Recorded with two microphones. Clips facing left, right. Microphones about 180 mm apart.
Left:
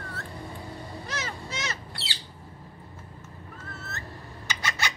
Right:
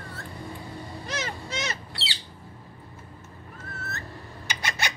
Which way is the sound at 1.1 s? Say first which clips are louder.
Right 4 dB; 20° right (ahead or behind).